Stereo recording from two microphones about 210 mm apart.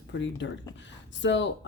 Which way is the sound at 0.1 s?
60° left (ahead or behind).